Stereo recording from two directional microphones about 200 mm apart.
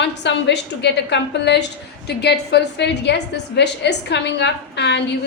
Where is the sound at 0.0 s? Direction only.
60° left (ahead or behind).